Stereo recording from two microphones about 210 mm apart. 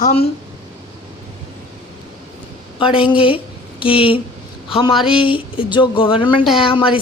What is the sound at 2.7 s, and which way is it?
A woman's voice, 25° left (ahead or behind).